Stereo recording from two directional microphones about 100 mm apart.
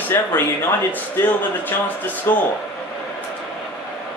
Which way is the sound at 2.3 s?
25° left (ahead or behind).